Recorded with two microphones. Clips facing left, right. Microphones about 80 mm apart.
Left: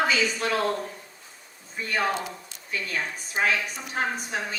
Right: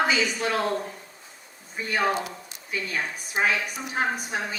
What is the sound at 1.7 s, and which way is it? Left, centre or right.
A woman's voice, centre.